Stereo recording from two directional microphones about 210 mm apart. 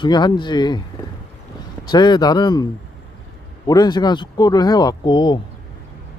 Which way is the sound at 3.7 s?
20° left (ahead or behind).